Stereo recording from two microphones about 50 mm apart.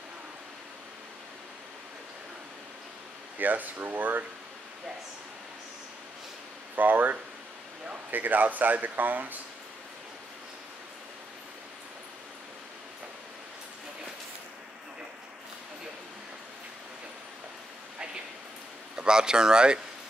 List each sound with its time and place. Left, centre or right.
3.3 s speech: right
6.7 s speech: right
18.9 s speech: centre